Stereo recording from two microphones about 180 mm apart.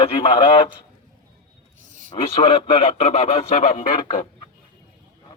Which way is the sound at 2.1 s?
30° left (ahead or behind).